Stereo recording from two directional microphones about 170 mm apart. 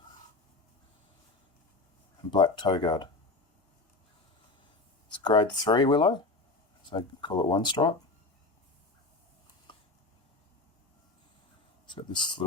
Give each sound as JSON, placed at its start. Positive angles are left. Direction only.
{"t": 2.3, "sound": "speech", "side_deg": 25}
{"t": 5.1, "sound": "speech", "side_deg": 30}
{"t": 9.7, "sound": "a sound", "side_deg": 30}
{"t": 11.9, "sound": "speech", "side_deg": 30}